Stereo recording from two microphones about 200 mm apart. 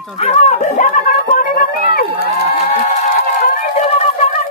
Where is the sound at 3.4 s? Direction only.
40° left (ahead or behind).